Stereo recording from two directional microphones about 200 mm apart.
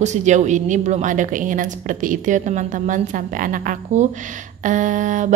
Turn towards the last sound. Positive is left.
turn(degrees=-40)  # may be behind; listen again after turning